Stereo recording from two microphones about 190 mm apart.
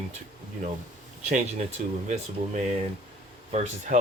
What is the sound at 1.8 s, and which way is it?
Speech, 45° right (ahead or behind).